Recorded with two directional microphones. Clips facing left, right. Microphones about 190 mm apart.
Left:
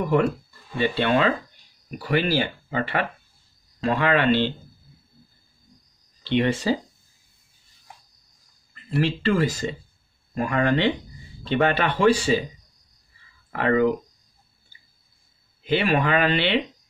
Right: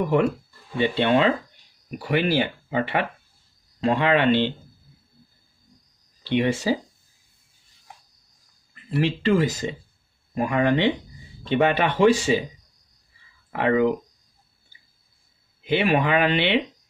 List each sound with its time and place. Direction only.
0.0 s speech: 15° right (ahead or behind)
6.2 s speech: 10° right (ahead or behind)
9.0 s speech: 20° right (ahead or behind)
13.5 s speech: 15° right (ahead or behind)
15.6 s speech: 15° right (ahead or behind)